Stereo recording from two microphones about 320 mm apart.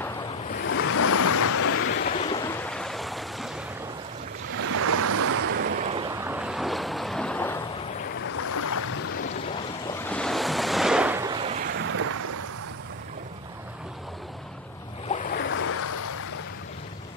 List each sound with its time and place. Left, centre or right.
0.7 s vehicle: left
2.2 s waves: centre
2.6 s boat: centre
4.6 s waves: right
5.9 s waves: centre
8.4 s boat: left
10.0 s waves: centre
11.8 s a sound: right
15.0 s waves: left
15.5 s vehicle: left